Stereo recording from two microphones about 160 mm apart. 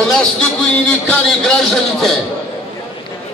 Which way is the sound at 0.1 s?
5° left (ahead or behind).